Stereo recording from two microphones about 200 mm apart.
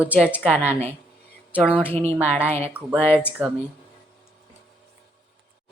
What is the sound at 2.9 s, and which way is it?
Speech, 10° left (ahead or behind).